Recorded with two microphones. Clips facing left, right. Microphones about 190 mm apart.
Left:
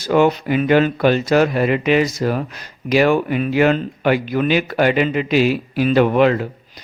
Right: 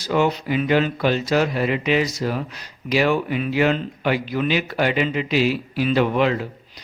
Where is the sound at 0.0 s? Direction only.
55° left (ahead or behind).